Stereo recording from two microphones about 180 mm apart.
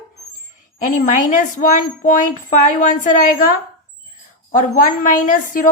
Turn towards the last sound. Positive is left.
turn(degrees=50)  # may be behind; listen again after turning